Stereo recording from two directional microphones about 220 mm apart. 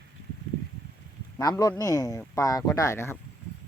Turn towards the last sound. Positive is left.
turn(degrees=10)  # may be behind; listen again after turning